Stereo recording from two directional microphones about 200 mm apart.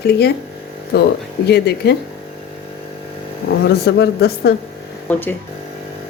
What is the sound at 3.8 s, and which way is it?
Speech, 55° left (ahead or behind).